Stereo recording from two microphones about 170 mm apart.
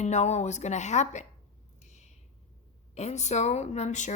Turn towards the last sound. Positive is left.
turn(degrees=45)  # may be behind; listen again after turning